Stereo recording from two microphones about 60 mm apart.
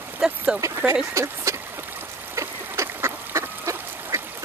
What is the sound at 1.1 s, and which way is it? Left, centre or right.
Speech, right.